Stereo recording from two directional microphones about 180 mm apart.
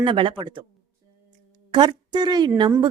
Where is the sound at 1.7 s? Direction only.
25° right (ahead or behind).